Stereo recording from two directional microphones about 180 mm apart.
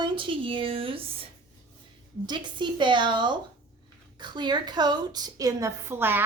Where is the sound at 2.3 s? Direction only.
25° right (ahead or behind).